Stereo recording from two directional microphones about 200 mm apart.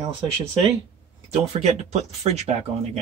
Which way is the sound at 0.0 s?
25° right (ahead or behind).